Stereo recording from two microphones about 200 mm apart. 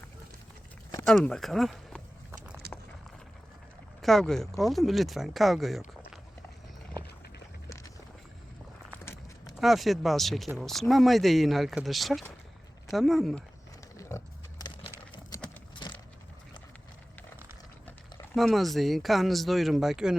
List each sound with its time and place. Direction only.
1.0 s speech: 5° left (ahead or behind)
2.6 s a sound: 50° right (ahead or behind)
4.0 s speech: centre (ahead or behind)
9.6 s speech: centre (ahead or behind)
14.1 s pig: 15° left (ahead or behind)
15.8 s keys jangling: 20° left (ahead or behind)
18.3 s speech: centre (ahead or behind)